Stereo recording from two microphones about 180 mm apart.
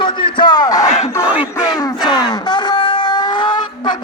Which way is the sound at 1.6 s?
25° left (ahead or behind).